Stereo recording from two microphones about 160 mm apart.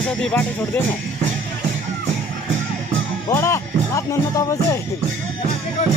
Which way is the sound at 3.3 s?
15° left (ahead or behind).